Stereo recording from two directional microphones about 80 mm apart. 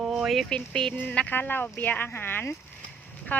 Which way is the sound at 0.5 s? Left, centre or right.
Centre.